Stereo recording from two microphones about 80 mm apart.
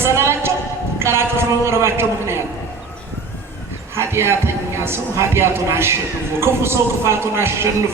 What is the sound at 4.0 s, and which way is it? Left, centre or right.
A man's voice, right.